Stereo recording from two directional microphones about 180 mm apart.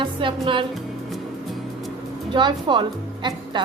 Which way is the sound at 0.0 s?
30° right (ahead or behind).